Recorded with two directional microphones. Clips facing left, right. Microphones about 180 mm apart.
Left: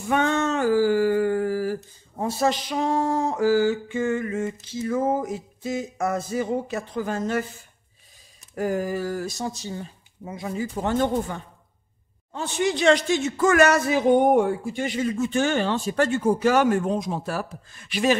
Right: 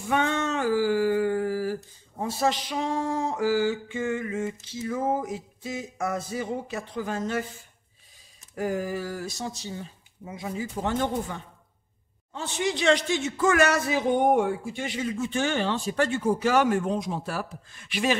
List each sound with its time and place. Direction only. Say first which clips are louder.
0.1 s a sound: left 3 dB; 45° left (ahead or behind)
2.2 s speech: left 3 dB; 45° left (ahead or behind)
8.5 s speech: left 3 dB; 45° left (ahead or behind)
12.3 s speech: left 4 dB; 50° left (ahead or behind)